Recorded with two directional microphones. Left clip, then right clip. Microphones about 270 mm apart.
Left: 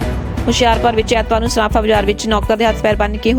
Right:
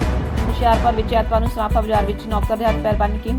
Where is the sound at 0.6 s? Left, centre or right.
Left.